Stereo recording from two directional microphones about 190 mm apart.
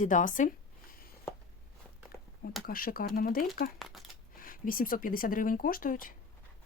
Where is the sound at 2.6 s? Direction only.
50° left (ahead or behind).